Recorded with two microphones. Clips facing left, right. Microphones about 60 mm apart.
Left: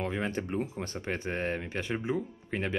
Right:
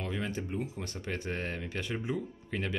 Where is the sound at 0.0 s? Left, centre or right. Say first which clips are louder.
Left 4 dB; left.